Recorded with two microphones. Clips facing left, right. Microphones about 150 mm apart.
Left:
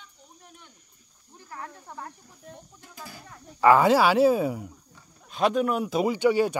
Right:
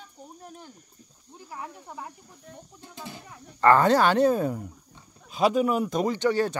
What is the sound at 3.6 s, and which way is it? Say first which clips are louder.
Speech: left 1 dB; 5° left (ahead or behind).